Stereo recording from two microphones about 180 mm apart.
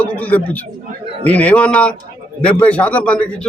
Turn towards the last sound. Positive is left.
turn(degrees=5)  # may be behind; listen again after turning